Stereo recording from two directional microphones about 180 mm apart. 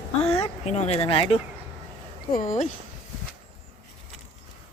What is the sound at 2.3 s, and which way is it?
Speech, 50° left (ahead or behind).